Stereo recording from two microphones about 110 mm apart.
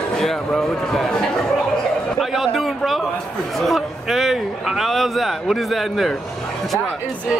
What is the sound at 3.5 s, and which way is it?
A man's voice, centre (ahead or behind).